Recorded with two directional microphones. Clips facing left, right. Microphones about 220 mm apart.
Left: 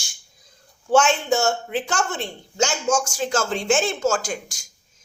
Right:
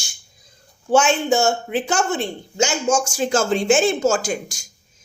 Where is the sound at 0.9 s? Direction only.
5° right (ahead or behind).